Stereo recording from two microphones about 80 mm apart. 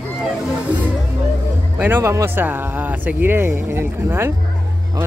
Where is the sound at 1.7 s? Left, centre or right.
Right.